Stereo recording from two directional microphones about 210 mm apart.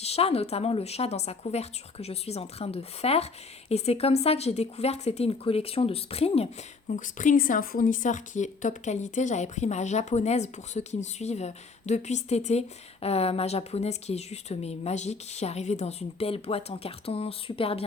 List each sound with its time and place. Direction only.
0.0 s speech: 30° left (ahead or behind)